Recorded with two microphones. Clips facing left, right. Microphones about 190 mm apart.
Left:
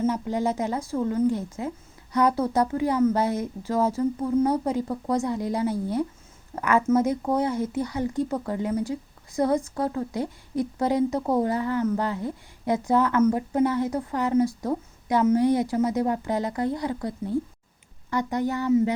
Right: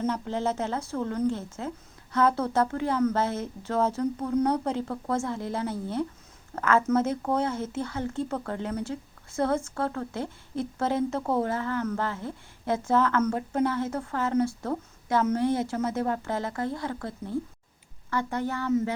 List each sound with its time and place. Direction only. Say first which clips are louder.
0.0 s speech: left 3 dB; 10° left (ahead or behind)